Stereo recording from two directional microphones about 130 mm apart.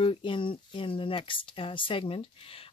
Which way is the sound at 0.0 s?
40° left (ahead or behind).